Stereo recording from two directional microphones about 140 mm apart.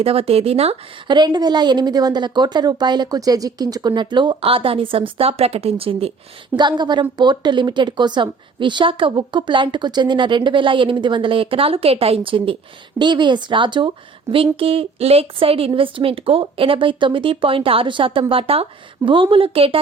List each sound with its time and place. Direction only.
0.0 s speech: 45° right (ahead or behind)
1.0 s a woman's voice: 30° right (ahead or behind)
6.6 s a woman's voice: 30° right (ahead or behind)